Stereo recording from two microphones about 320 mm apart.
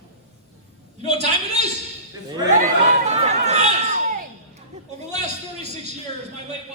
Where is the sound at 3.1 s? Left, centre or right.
Right.